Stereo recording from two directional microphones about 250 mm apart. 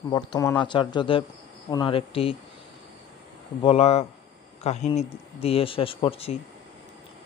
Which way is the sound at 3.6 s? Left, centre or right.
Left.